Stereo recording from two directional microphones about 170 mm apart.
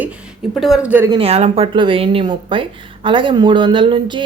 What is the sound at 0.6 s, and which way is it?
Speech, 5° right (ahead or behind).